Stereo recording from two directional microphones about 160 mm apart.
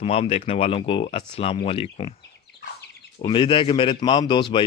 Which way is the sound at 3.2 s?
30° left (ahead or behind).